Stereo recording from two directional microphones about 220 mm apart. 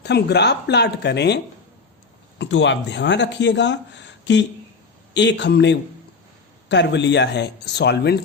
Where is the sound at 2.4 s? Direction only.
55° left (ahead or behind).